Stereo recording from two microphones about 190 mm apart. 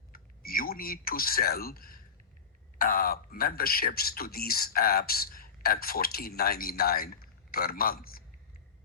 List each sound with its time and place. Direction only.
0.1 s speech: 50° left (ahead or behind)